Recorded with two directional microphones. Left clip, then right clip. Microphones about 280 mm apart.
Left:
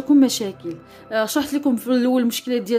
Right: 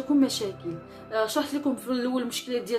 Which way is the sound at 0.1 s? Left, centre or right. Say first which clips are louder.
Left 8 dB; left.